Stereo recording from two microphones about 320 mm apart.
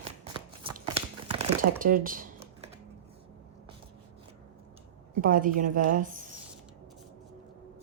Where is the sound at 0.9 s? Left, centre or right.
Centre.